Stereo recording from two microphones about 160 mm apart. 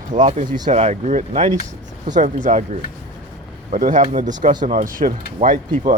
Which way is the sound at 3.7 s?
55° right (ahead or behind).